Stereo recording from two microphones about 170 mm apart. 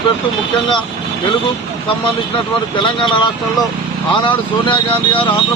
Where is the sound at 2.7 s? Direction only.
30° left (ahead or behind).